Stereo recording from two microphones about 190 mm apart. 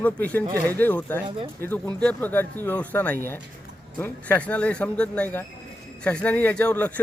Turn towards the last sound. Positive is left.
turn(degrees=10)  # may be behind; listen again after turning